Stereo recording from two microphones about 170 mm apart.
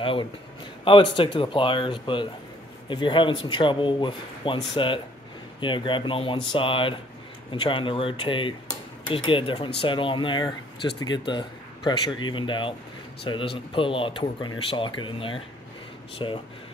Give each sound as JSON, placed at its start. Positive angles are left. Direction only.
{"t": 0.0, "sound": "speech", "side_deg": 30}